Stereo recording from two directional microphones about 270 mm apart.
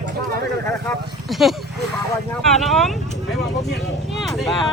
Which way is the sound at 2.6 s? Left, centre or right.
Centre.